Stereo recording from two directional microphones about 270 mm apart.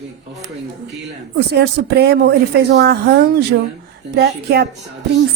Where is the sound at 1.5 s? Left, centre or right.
Right.